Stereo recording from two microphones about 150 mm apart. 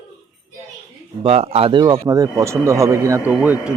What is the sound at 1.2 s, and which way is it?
Speech, 40° right (ahead or behind).